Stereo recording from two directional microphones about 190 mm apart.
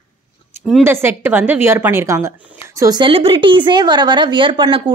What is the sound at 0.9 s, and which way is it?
A woman's voice, 10° right (ahead or behind).